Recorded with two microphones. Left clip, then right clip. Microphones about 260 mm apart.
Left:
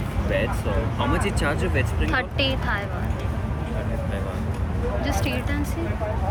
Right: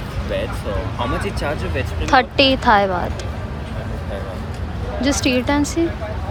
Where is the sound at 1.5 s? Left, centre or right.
Centre.